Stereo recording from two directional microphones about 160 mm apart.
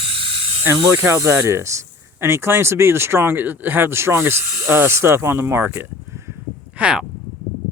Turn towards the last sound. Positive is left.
turn(degrees=-5)  # may be behind; listen again after turning